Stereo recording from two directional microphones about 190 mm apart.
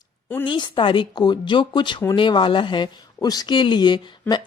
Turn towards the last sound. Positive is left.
turn(degrees=25)  # may be behind; listen again after turning